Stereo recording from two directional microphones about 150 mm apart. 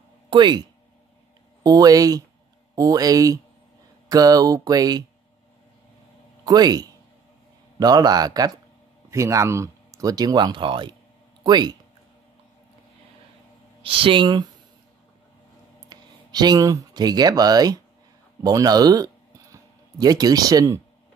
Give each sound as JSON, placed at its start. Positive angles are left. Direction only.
{"t": 0.3, "sound": "speech", "side_deg": -30}
{"t": 6.4, "sound": "a man's voice", "side_deg": -25}
{"t": 13.8, "sound": "speech", "side_deg": -35}
{"t": 15.9, "sound": "speech", "side_deg": -30}